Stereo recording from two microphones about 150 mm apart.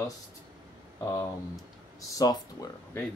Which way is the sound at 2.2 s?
25° left (ahead or behind).